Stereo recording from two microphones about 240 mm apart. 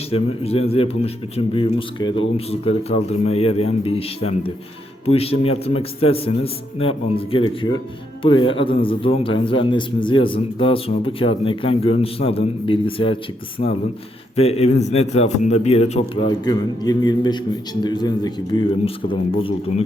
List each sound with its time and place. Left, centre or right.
0.1 s a man's voice: left
16.8 s a man's voice: centre